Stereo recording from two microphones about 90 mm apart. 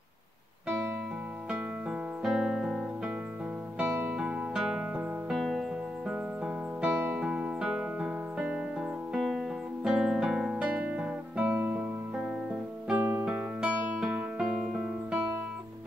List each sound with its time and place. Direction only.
1.5 s music: 10° right (ahead or behind)
3.7 s music: 20° right (ahead or behind)
9.1 s music: centre (ahead or behind)
9.8 s guitar: 5° right (ahead or behind)
12.9 s music: 20° right (ahead or behind)
13.2 s music: 10° right (ahead or behind)